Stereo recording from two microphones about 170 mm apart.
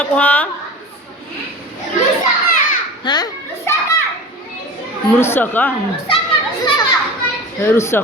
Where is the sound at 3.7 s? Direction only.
15° left (ahead or behind).